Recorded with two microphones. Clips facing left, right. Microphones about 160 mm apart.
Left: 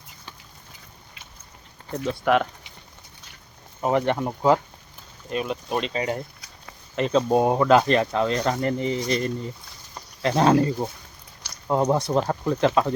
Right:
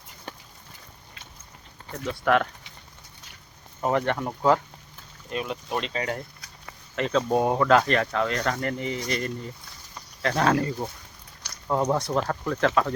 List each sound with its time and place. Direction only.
2.2 s speech: 15° left (ahead or behind)
3.8 s speech: 15° left (ahead or behind)
11.7 s speech: 15° left (ahead or behind)